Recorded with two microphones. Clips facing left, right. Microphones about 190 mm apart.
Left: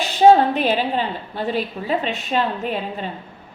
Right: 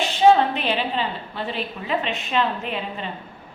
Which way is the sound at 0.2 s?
40° left (ahead or behind).